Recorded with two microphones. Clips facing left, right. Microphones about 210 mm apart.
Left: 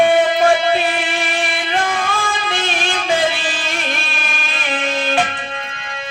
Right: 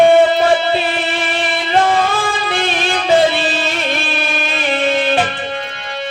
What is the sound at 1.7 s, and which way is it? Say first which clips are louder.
Music: right 8 dB; 30° right (ahead or behind).